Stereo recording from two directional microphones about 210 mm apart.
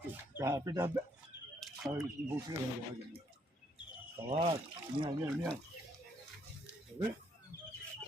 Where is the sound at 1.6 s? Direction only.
Centre (ahead or behind).